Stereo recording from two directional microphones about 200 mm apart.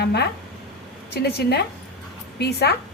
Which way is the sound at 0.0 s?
55° left (ahead or behind).